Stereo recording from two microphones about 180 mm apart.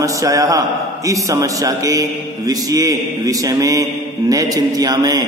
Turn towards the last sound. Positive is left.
turn(degrees=-20)  # may be behind; listen again after turning